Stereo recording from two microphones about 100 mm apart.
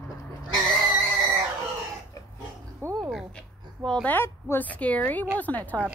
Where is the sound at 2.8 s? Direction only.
40° right (ahead or behind).